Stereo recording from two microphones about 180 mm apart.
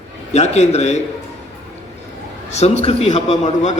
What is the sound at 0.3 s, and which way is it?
Speech, 35° left (ahead or behind).